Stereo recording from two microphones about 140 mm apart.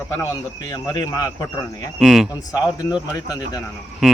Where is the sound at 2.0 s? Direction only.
5° right (ahead or behind).